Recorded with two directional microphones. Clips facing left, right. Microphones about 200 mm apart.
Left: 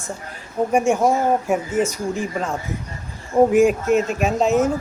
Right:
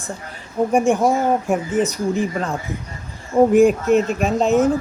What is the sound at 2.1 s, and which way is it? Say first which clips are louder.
Speech: right 3 dB; 5° right (ahead or behind).